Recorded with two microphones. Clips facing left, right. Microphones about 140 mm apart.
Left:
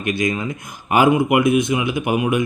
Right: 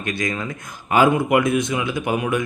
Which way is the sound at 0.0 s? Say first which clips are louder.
Left 4 dB; 15° left (ahead or behind).